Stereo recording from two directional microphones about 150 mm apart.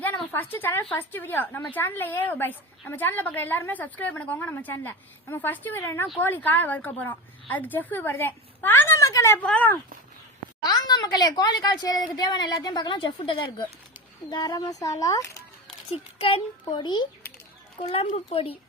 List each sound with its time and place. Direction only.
0.3 s a woman's voice: 15° left (ahead or behind)
10.6 s speech: 25° left (ahead or behind)
15.6 s a child's voice: 40° left (ahead or behind)